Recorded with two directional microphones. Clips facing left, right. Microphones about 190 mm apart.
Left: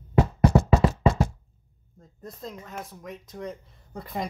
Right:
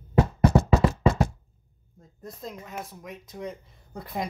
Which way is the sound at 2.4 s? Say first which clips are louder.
Right 1 dB; 5° right (ahead or behind).